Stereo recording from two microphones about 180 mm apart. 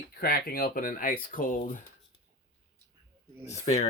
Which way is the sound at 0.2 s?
55° left (ahead or behind).